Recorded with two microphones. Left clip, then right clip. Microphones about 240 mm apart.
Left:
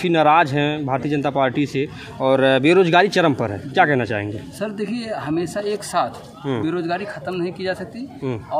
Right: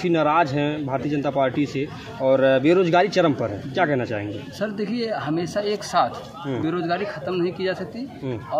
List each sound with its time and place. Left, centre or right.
0.0 s speech: left
4.6 s speech: centre